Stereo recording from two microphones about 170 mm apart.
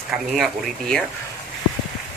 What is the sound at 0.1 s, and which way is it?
Speech, centre (ahead or behind).